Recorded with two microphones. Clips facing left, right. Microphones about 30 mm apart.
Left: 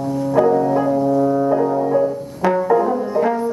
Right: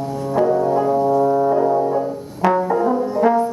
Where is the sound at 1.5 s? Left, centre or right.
Centre.